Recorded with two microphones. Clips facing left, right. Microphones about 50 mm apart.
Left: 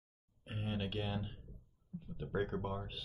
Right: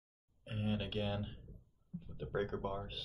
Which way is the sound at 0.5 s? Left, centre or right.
Centre.